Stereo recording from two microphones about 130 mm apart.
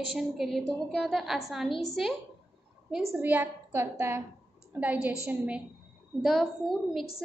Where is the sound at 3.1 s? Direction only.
15° right (ahead or behind).